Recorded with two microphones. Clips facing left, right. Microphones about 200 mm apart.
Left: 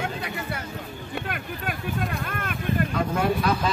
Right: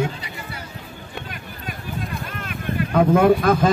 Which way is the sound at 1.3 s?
55° left (ahead or behind).